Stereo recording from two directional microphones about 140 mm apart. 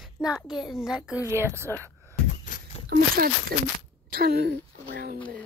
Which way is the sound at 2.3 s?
60° left (ahead or behind).